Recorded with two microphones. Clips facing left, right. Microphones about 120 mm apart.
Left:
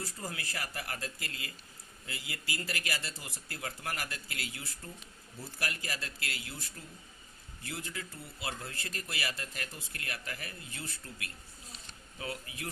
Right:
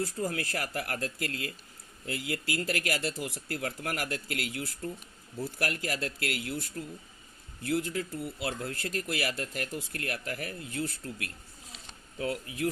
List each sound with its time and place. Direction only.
0.3 s speech: 55° right (ahead or behind)